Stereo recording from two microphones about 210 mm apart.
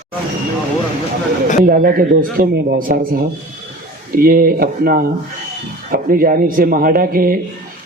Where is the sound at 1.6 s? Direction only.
45° right (ahead or behind).